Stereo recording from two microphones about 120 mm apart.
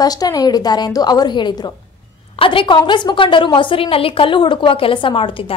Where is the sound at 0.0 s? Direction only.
30° left (ahead or behind).